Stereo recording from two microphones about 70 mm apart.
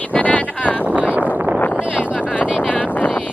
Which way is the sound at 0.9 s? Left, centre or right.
Centre.